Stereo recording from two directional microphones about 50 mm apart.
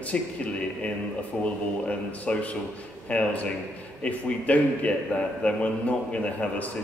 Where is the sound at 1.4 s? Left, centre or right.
Left.